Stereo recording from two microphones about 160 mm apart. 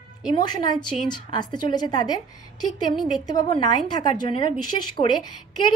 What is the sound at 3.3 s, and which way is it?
Speech, 25° left (ahead or behind).